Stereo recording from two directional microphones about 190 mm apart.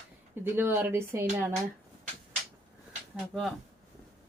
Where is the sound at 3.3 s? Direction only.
Centre (ahead or behind).